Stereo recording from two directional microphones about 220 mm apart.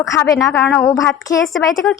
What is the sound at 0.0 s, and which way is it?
Speech, 15° left (ahead or behind).